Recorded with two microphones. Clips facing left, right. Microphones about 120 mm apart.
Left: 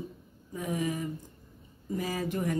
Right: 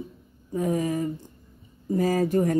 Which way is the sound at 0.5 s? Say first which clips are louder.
Right 7 dB; 40° right (ahead or behind).